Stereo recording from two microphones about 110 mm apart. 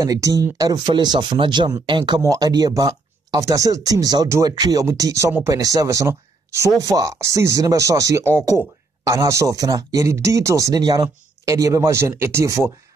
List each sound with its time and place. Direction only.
0.0 s speech: 30° right (ahead or behind)
2.2 s speech: 35° right (ahead or behind)